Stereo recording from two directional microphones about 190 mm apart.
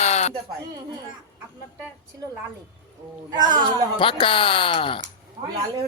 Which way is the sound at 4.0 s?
25° left (ahead or behind).